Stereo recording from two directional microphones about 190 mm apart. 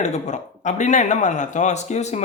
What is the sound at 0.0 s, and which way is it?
Speech, 40° left (ahead or behind).